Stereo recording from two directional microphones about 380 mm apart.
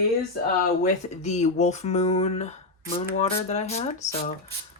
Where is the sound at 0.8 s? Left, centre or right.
Centre.